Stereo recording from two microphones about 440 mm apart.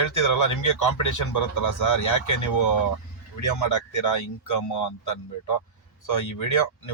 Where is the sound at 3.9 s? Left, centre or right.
Left.